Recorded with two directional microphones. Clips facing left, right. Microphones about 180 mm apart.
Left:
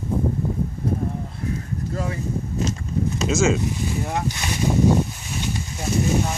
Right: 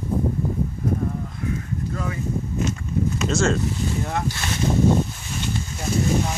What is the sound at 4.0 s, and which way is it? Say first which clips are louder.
Speech: even; 15° left (ahead or behind).